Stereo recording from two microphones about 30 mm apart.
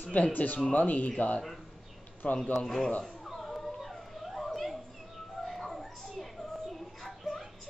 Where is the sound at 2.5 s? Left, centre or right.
Centre.